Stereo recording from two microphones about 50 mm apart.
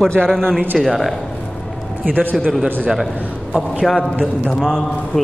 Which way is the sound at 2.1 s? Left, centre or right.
Right.